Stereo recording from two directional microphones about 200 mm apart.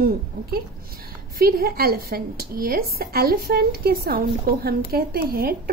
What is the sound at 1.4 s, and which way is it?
A woman's voice, 50° right (ahead or behind).